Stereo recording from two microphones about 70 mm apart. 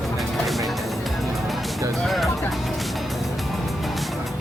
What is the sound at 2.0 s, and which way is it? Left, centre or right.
Music, centre.